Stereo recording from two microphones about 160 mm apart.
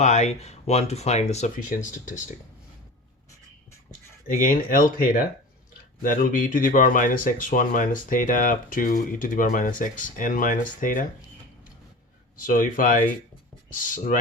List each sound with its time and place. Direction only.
0.0 s speech: 45° left (ahead or behind)
1.7 s speech: 55° left (ahead or behind)
4.4 s speech: 60° left (ahead or behind)
12.4 s speech: 60° left (ahead or behind)